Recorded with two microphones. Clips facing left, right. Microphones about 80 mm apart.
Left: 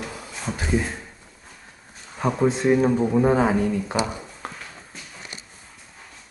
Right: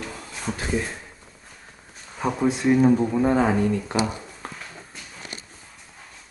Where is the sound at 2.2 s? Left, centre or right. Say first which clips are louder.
Left 2 dB; centre.